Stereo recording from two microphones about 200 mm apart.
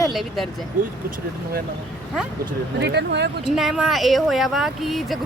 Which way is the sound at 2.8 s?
55° right (ahead or behind).